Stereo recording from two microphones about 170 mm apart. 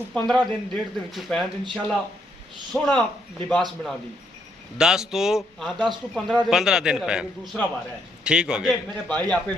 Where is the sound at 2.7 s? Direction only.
5° left (ahead or behind).